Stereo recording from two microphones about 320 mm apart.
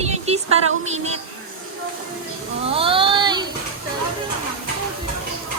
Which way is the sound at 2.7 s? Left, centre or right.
Centre.